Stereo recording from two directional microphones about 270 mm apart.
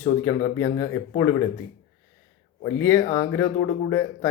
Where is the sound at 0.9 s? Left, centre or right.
Centre.